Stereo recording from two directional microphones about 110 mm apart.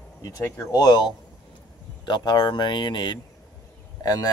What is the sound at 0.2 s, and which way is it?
Speech, 30° left (ahead or behind).